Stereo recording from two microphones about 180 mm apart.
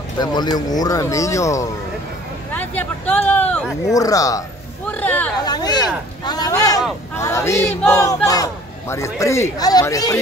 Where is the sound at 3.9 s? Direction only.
20° left (ahead or behind).